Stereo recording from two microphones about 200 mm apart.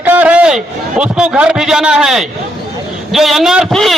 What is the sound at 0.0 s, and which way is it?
A man's voice, 10° right (ahead or behind).